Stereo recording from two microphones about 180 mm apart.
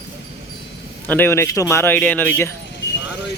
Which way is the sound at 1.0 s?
10° left (ahead or behind).